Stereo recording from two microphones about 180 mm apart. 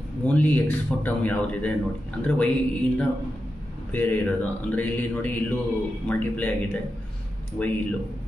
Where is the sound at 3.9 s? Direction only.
10° left (ahead or behind).